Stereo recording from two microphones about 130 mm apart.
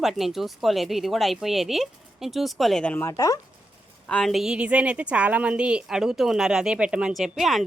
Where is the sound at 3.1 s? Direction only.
30° left (ahead or behind).